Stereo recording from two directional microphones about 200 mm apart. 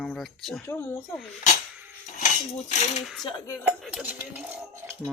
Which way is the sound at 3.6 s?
5° right (ahead or behind).